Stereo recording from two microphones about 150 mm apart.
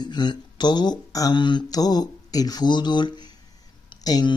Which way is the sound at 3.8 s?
30° left (ahead or behind).